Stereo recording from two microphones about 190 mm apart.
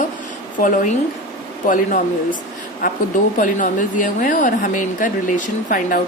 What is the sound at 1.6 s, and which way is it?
Speech, 45° left (ahead or behind).